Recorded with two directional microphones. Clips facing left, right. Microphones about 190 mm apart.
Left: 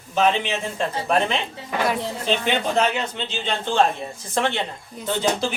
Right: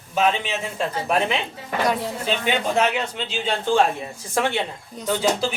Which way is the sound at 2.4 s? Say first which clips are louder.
Right 1 dB; 5° right (ahead or behind).